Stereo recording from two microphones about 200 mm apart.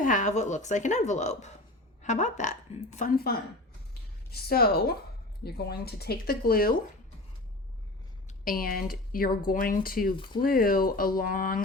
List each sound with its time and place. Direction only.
0.0 s a woman's voice: 40° left (ahead or behind)
8.3 s speech: 45° left (ahead or behind)